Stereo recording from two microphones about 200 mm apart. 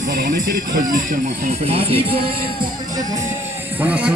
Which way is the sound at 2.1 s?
50° right (ahead or behind).